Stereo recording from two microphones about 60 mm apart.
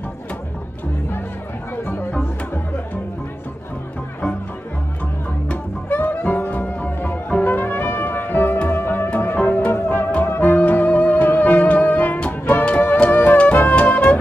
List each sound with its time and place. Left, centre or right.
1.9 s music: left
5.5 s music: left